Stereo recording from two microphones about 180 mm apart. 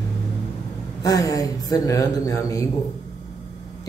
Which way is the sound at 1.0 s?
20° left (ahead or behind).